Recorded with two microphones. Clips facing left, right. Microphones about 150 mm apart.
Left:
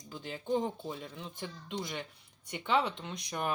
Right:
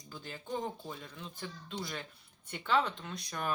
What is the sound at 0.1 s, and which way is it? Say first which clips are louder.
Speech: left 7 dB; 20° left (ahead or behind).